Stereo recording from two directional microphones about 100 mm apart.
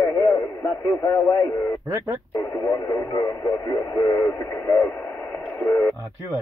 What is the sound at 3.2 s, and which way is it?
Speech, 30° left (ahead or behind).